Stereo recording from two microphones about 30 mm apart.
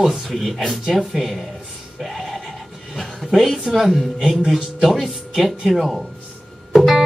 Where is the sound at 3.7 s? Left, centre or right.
Centre.